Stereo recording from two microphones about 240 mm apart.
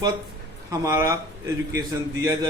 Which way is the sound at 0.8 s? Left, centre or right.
Centre.